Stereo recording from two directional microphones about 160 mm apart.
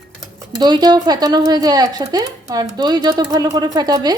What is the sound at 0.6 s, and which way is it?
Speech, 25° right (ahead or behind).